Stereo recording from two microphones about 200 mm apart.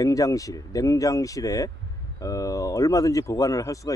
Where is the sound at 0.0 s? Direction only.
15° left (ahead or behind).